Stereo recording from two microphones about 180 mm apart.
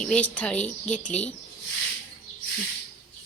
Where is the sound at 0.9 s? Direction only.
45° left (ahead or behind).